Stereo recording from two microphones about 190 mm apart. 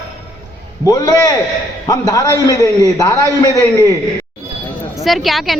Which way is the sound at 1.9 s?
15° left (ahead or behind).